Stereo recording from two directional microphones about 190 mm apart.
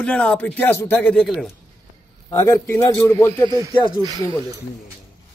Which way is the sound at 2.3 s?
15° left (ahead or behind).